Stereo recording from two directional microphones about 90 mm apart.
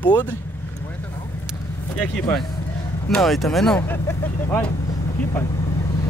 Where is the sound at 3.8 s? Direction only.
25° left (ahead or behind).